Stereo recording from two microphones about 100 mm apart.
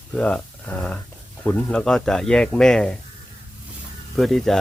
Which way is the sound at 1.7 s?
5° left (ahead or behind).